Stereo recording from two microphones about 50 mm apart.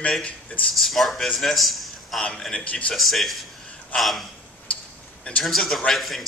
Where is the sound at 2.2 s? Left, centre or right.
Centre.